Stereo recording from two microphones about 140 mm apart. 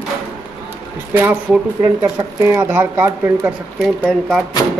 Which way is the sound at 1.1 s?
15° right (ahead or behind).